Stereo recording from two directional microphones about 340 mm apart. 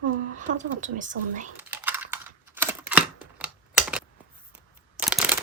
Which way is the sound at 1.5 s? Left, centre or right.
Centre.